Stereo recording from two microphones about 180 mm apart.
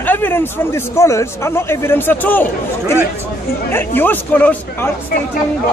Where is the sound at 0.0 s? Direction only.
10° left (ahead or behind).